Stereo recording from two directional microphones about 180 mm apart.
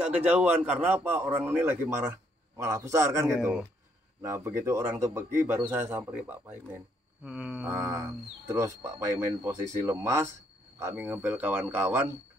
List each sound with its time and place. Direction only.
0.0 s speech: 5° right (ahead or behind)